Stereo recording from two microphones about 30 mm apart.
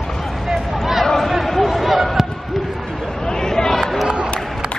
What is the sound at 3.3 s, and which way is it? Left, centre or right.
Chatter, left.